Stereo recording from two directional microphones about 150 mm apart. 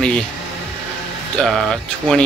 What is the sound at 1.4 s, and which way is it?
Speech, centre (ahead or behind).